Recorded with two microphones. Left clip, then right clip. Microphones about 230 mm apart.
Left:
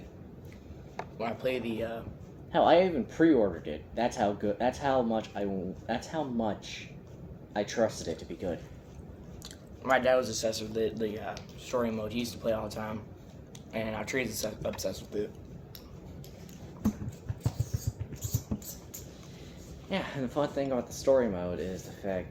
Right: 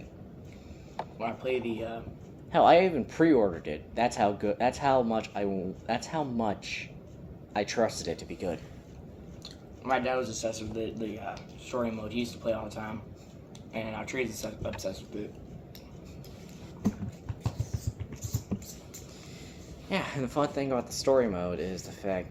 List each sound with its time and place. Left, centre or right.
1.2 s speech: left
2.5 s speech: right
9.4 s speech: left
19.9 s speech: right